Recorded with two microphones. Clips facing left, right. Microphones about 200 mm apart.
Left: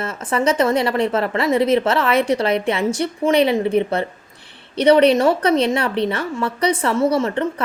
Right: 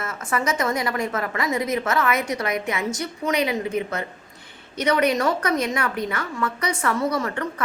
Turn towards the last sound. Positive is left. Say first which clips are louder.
# left 7 dB
turn(degrees=25)  # may be behind; listen again after turning